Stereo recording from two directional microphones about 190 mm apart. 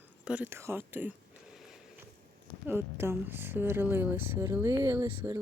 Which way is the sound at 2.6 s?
10° right (ahead or behind).